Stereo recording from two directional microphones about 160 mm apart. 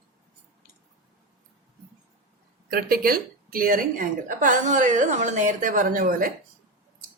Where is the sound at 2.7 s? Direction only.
65° right (ahead or behind).